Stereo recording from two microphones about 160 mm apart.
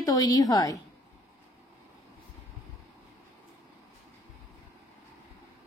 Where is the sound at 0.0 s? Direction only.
25° left (ahead or behind).